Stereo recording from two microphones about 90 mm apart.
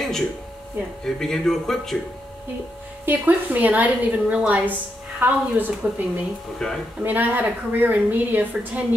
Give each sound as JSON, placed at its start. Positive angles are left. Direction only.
{"t": 1.0, "sound": "a man's voice", "side_deg": 5}
{"t": 3.1, "sound": "a woman's voice", "side_deg": -20}
{"t": 6.6, "sound": "a man's voice", "side_deg": 5}
{"t": 7.0, "sound": "a woman's voice", "side_deg": -20}